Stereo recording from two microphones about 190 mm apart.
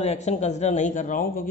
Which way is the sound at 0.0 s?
35° left (ahead or behind).